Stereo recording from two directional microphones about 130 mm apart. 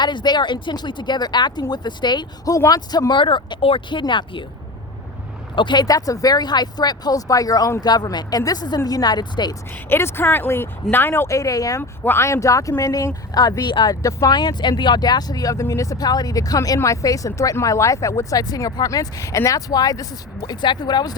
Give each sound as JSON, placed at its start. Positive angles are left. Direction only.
{"t": 0.0, "sound": "speech", "side_deg": 35}
{"t": 5.5, "sound": "speech", "side_deg": 35}
{"t": 9.9, "sound": "speech", "side_deg": 20}